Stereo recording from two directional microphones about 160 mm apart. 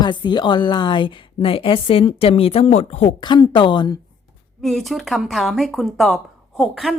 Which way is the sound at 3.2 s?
30° left (ahead or behind).